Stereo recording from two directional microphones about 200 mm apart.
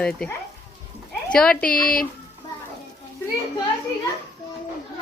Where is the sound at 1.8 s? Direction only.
45° left (ahead or behind).